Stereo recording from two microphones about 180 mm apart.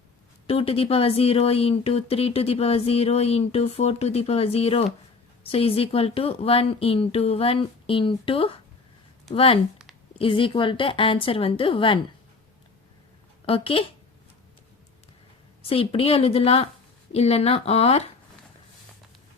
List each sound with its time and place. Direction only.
0.4 s a woman's voice: 30° left (ahead or behind)
13.4 s speech: 30° left (ahead or behind)
15.6 s speech: 30° left (ahead or behind)